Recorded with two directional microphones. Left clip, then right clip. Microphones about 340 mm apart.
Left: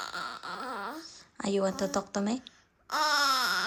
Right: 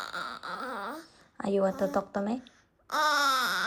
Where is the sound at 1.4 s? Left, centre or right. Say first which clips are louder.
Right 2 dB; centre.